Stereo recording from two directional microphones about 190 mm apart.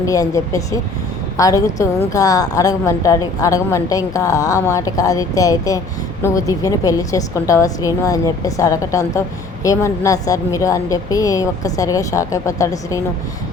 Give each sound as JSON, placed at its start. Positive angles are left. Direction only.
{"t": 0.0, "sound": "a woman's voice", "side_deg": 15}